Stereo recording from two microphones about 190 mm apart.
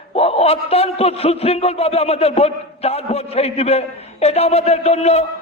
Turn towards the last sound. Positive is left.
turn(degrees=35)  # may be behind; listen again after turning